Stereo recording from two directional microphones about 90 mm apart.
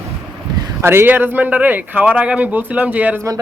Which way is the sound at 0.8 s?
25° right (ahead or behind).